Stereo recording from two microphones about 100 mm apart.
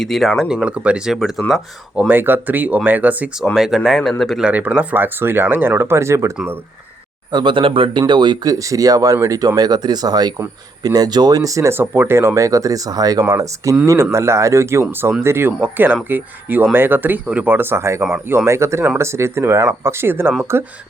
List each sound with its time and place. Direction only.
0.0 s speech: centre (ahead or behind)
2.0 s speech: 20° right (ahead or behind)
3.5 s speech: 5° right (ahead or behind)
4.4 s speech: 15° right (ahead or behind)
6.3 s speech: 15° right (ahead or behind)
7.3 s speech: 50° right (ahead or behind)
8.5 s speech: 35° right (ahead or behind)